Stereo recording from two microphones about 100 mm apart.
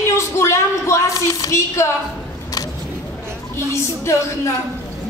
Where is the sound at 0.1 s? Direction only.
30° left (ahead or behind).